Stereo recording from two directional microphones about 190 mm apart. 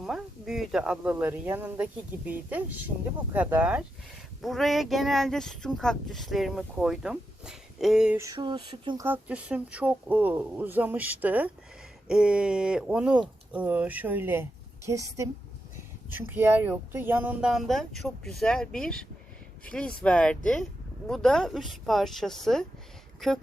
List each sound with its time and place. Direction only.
0.0 s speech: centre (ahead or behind)
8.2 s speech: 20° right (ahead or behind)
9.0 s speech: 10° right (ahead or behind)